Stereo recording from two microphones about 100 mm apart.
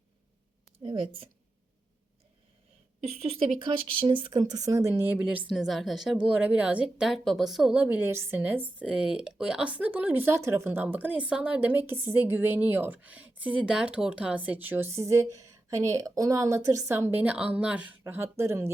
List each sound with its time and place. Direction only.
0.8 s a woman's voice: 55° right (ahead or behind)
3.0 s speech: 90° right; by 5.5 s 15° right (ahead or behind)
5.5 s a woman's voice: centre (ahead or behind)
18.0 s speech: 25° right (ahead or behind)